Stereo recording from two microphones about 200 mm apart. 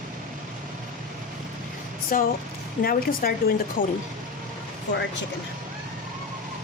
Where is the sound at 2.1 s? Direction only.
45° left (ahead or behind).